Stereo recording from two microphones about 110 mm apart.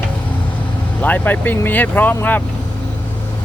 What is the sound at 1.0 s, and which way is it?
Speech, 15° left (ahead or behind).